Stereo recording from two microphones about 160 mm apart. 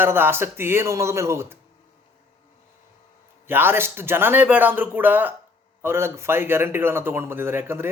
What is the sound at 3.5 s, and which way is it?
A man's voice, 15° right (ahead or behind).